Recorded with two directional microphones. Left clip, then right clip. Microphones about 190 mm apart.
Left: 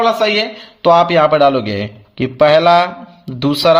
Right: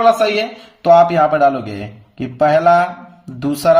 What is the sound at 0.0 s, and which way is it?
Speech, 35° left (ahead or behind).